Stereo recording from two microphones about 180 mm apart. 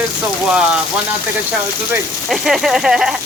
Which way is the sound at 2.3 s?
Centre (ahead or behind).